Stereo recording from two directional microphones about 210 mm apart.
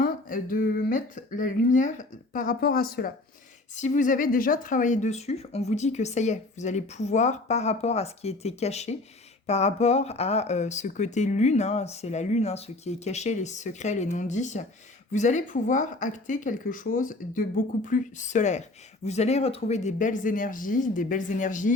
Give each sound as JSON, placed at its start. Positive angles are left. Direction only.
{"t": 0.0, "sound": "speech", "side_deg": 40}